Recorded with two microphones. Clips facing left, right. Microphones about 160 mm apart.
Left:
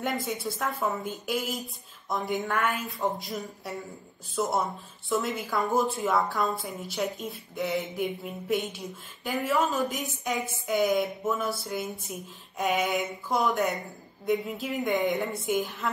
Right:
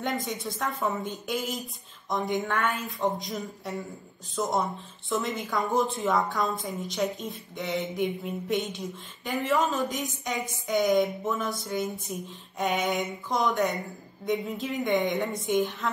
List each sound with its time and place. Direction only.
0.0 s a woman's voice: 5° left (ahead or behind)
12.1 s a sound: 5° left (ahead or behind)
12.5 s a woman's voice: centre (ahead or behind)